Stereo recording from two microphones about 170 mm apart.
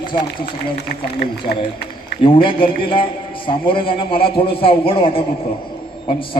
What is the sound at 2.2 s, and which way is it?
A man's voice, 30° left (ahead or behind).